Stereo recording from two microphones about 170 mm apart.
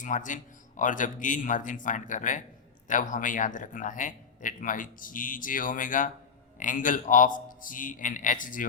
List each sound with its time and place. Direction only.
0.0 s speech: 50° left (ahead or behind)